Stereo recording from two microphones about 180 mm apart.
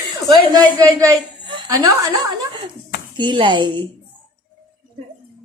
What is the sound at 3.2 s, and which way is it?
Speech, 25° right (ahead or behind).